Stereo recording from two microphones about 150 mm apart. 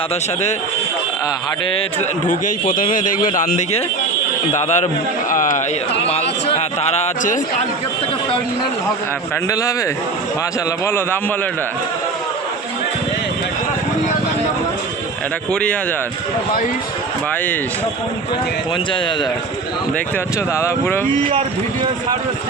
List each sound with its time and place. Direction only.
2.0 s a man's voice: 60° left (ahead or behind)
4.5 s a man's voice: 50° left (ahead or behind)
6.1 s a man's voice: 45° left (ahead or behind)
9.5 s a man's voice: 20° left (ahead or behind)
10.8 s speech: 15° left (ahead or behind)
20.6 s speech: 15° left (ahead or behind)